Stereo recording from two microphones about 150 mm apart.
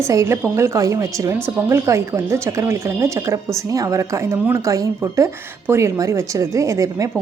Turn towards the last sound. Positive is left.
turn(degrees=-20)  # may be behind; listen again after turning